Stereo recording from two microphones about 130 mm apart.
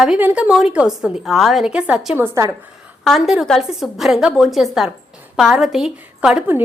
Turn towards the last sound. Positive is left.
turn(degrees=-10)  # may be behind; listen again after turning